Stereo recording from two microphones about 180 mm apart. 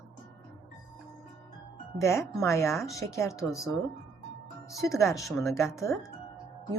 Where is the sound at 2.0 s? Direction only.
15° left (ahead or behind).